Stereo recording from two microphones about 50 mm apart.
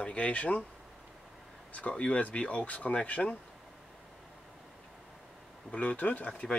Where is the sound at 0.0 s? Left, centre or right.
Left.